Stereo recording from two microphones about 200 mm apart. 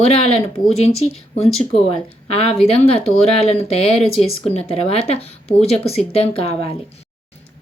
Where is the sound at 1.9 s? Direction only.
30° left (ahead or behind).